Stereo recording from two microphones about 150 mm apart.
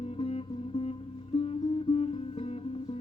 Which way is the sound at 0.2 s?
40° left (ahead or behind).